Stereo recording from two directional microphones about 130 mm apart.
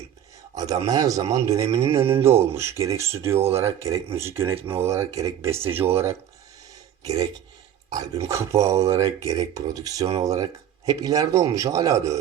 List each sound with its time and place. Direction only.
0.5 s a man's voice: 30° right (ahead or behind)
7.0 s speech: 30° right (ahead or behind)